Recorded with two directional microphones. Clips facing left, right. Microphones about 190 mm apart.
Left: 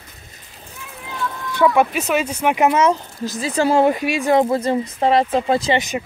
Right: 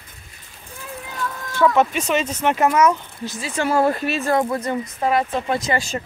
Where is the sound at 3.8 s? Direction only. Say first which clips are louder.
Left 3 dB; 10° left (ahead or behind); by 5.8 s 30° left (ahead or behind).